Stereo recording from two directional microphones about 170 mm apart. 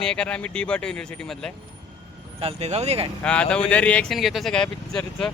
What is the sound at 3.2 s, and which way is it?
Speech, 5° left (ahead or behind).